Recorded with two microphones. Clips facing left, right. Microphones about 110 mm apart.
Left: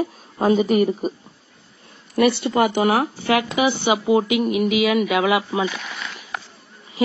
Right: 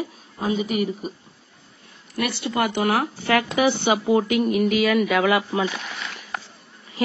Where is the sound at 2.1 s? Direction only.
30° left (ahead or behind).